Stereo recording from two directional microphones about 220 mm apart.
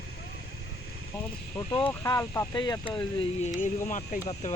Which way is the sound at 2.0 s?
15° left (ahead or behind).